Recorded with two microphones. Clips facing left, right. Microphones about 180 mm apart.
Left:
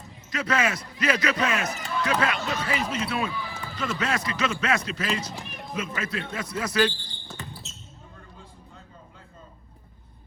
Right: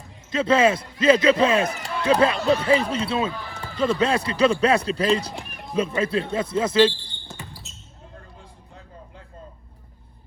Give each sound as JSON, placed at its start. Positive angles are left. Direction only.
{"t": 0.3, "sound": "speech", "side_deg": -25}